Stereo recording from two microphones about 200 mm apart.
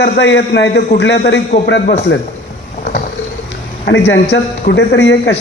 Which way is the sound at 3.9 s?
60° left (ahead or behind).